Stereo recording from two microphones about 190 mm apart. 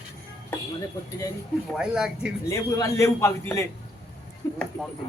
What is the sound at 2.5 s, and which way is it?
A man's voice, 15° left (ahead or behind).